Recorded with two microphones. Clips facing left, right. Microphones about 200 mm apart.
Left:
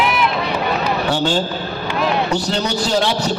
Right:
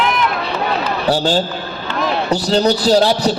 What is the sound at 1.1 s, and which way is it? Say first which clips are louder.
A man's voice: right 6 dB; 35° right (ahead or behind).